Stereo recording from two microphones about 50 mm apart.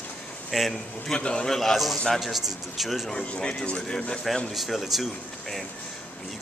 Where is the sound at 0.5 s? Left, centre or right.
Centre.